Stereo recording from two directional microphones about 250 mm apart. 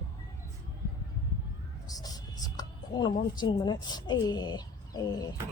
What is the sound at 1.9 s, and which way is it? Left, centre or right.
Speech, centre.